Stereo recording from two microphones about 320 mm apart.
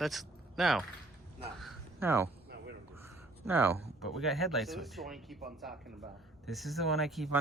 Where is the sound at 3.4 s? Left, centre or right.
Centre.